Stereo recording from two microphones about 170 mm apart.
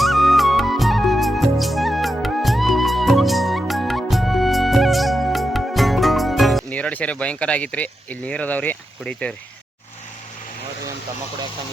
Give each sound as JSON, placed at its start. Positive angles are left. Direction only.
{"t": 0.0, "sound": "music", "side_deg": 0}